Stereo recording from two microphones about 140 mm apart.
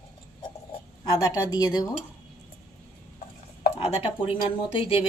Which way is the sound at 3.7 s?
45° left (ahead or behind).